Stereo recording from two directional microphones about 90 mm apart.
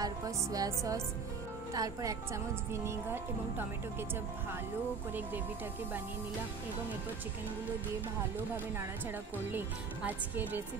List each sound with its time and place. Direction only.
0.0 s a woman's voice: 40° right (ahead or behind); by 3.6 s 25° right (ahead or behind)
9.5 s speech: 20° right (ahead or behind)